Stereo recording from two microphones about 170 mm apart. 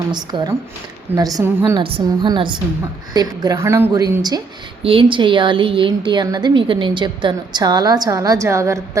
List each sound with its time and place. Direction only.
0.1 s a woman's voice: 25° right (ahead or behind)
4.8 s a woman's voice: 30° right (ahead or behind)